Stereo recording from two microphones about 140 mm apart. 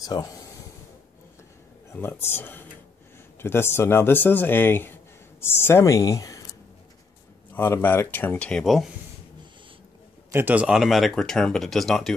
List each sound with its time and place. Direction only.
0.0 s speech: 30° left (ahead or behind)
1.9 s speech: 15° left (ahead or behind)
7.5 s speech: 15° left (ahead or behind)
10.3 s speech: 10° right (ahead or behind)